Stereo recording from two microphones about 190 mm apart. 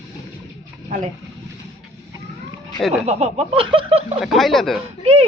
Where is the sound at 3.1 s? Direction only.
35° right (ahead or behind).